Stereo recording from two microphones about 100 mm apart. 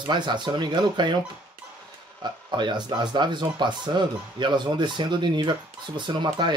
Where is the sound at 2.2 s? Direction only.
50° right (ahead or behind).